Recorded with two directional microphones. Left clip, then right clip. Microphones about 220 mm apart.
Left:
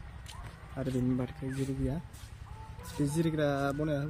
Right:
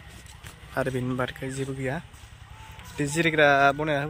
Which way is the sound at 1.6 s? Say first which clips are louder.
Right 6 dB; 20° right (ahead or behind).